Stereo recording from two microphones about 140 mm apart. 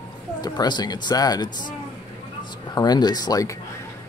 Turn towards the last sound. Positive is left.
turn(degrees=25)  # may be behind; listen again after turning